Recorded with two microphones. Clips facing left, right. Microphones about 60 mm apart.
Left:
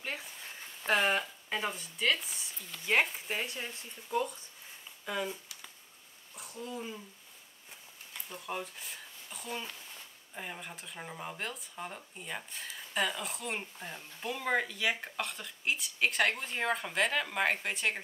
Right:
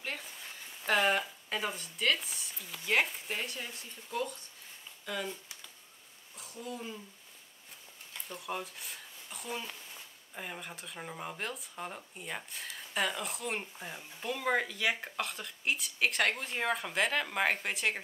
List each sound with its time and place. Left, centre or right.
0.0 s a sound: centre
1.5 s speech: centre
2.9 s speech: centre
6.7 s speech: centre
8.1 s a sound: centre
9.7 s speech: centre